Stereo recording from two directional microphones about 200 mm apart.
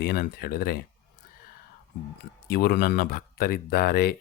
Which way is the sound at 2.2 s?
50° left (ahead or behind).